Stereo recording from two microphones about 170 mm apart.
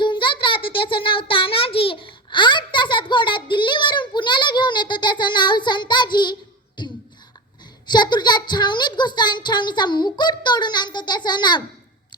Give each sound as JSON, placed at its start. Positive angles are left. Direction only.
{"t": 0.0, "sound": "child singing", "side_deg": 30}
{"t": 6.8, "sound": "beatboxing", "side_deg": 25}
{"t": 7.9, "sound": "a sound", "side_deg": 25}